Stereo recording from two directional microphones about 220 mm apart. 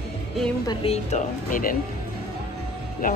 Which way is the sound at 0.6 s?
20° left (ahead or behind).